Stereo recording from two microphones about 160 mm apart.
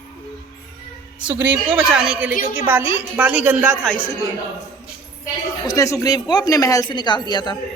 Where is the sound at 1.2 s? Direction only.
10° right (ahead or behind).